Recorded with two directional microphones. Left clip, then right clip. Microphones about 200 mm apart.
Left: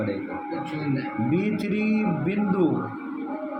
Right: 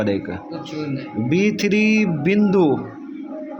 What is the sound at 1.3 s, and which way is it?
Speech, 55° right (ahead or behind).